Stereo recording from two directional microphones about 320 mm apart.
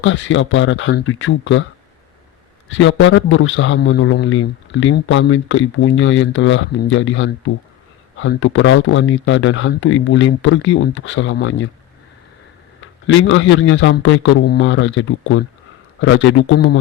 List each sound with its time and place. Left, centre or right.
0.0 s a man's voice: left
2.6 s a man's voice: left
12.8 s a man's voice: left